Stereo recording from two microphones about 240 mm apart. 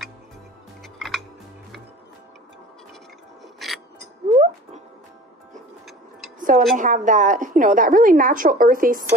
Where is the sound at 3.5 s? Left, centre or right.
Centre.